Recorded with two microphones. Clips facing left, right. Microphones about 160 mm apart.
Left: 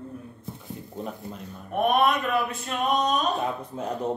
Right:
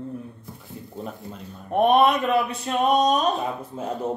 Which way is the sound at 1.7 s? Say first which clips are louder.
Right 4 dB; 30° right (ahead or behind).